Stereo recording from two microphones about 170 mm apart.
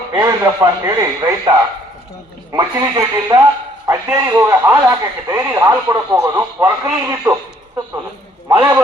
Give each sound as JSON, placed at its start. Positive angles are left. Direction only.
{"t": 0.1, "sound": "speech", "side_deg": -20}
{"t": 2.5, "sound": "a man's voice", "side_deg": -20}
{"t": 8.4, "sound": "a man's voice", "side_deg": -20}